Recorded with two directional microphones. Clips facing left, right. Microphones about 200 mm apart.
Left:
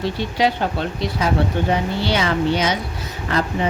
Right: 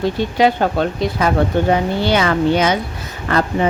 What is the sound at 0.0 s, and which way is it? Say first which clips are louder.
Speech: right 5 dB; 50° right (ahead or behind).